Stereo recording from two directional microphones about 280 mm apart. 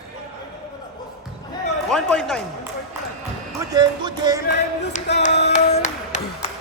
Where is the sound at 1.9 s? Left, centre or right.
Centre.